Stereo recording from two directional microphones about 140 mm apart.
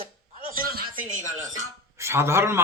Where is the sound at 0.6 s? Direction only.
90° right.